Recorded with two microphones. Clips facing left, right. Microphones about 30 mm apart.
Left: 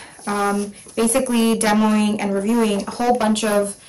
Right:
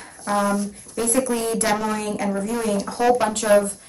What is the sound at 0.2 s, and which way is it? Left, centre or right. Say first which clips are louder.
Speech: left 1 dB; centre.